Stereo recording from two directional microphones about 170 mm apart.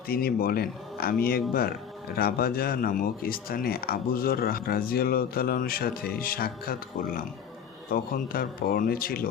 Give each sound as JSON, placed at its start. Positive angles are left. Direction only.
{"t": 0.1, "sound": "speech", "side_deg": 60}